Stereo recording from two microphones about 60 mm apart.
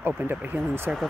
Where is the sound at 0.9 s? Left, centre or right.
Centre.